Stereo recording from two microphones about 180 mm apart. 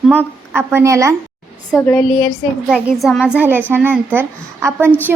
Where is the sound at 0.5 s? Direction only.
15° right (ahead or behind).